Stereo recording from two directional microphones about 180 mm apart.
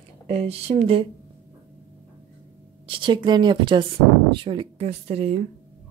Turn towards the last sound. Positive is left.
turn(degrees=-35)  # may be behind; listen again after turning